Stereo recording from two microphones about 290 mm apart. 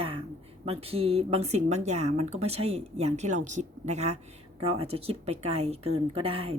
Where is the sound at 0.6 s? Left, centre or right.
Centre.